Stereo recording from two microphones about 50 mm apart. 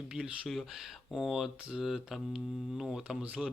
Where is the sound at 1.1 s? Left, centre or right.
Centre.